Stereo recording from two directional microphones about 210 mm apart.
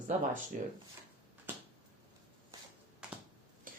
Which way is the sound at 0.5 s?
40° right (ahead or behind).